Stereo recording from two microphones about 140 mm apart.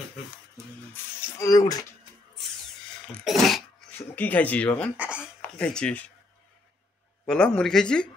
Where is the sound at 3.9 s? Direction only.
10° left (ahead or behind).